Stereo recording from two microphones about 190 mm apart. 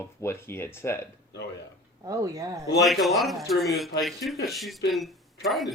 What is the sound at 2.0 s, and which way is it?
Speech, 20° right (ahead or behind).